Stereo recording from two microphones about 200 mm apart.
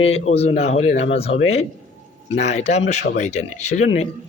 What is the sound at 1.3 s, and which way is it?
Speech, 75° left (ahead or behind).